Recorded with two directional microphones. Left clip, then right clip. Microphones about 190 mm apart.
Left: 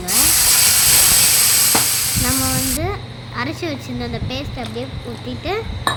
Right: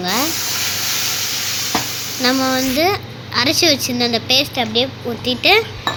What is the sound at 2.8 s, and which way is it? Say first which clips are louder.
A child's voice: right 8 dB; 10° right (ahead or behind).